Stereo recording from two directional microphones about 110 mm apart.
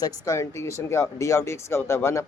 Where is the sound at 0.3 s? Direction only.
25° left (ahead or behind).